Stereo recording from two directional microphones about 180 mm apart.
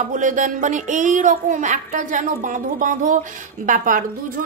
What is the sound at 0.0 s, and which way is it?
Speech, 45° right (ahead or behind).